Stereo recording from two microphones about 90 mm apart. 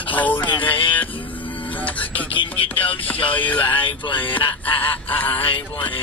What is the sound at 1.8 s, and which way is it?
Speech, 15° left (ahead or behind).